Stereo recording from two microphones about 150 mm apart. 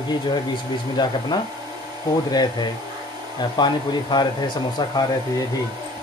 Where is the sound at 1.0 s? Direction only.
30° left (ahead or behind).